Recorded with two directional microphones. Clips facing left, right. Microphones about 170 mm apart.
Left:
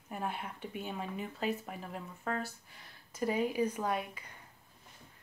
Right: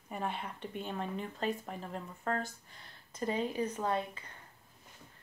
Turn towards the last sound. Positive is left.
turn(degrees=10)  # may be behind; listen again after turning